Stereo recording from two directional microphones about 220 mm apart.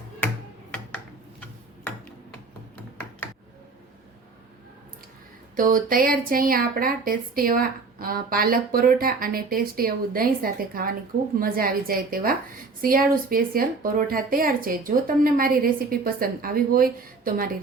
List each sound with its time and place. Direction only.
5.5 s a woman's voice: 40° right (ahead or behind)